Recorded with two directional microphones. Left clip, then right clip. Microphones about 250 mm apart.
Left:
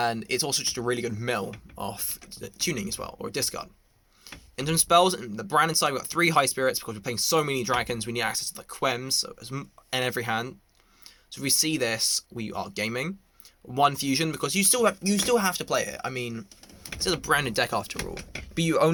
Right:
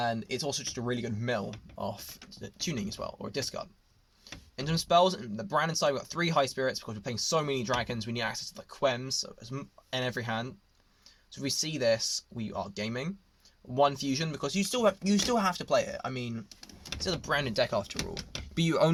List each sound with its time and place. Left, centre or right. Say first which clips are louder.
0.0 s speech: left 5 dB; left
18.5 s speech: left 4 dB; centre